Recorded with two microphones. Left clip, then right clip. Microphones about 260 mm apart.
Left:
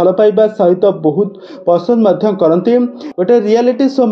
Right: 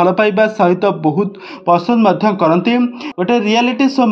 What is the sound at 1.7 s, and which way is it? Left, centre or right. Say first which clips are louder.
A man's voice: left 2 dB; right.